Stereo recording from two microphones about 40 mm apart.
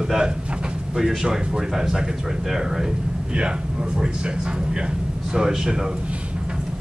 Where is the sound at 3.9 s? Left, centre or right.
Right.